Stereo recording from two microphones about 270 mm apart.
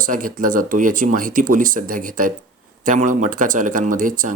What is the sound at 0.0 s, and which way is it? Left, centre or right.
Speech, right.